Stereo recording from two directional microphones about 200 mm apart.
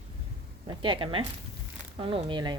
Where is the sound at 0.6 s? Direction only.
25° right (ahead or behind).